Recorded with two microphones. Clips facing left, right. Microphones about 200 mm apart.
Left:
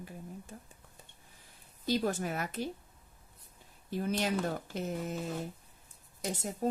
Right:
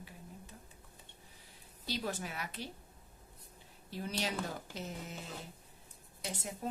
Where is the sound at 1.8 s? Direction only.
50° left (ahead or behind).